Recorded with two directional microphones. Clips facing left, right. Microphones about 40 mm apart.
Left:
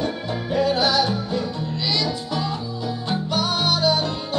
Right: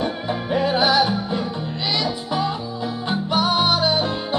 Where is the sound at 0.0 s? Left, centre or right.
Right.